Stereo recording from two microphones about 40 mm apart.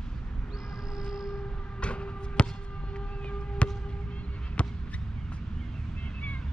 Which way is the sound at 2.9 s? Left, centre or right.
Left.